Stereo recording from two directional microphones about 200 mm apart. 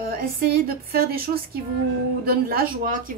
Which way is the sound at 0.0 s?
45° right (ahead or behind).